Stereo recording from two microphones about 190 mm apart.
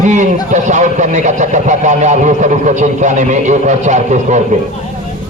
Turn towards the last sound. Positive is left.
turn(degrees=-40)  # may be behind; listen again after turning